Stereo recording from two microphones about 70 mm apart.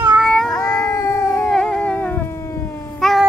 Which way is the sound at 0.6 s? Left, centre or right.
Left.